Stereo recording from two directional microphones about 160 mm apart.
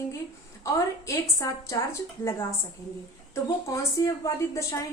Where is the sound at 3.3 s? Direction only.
20° left (ahead or behind).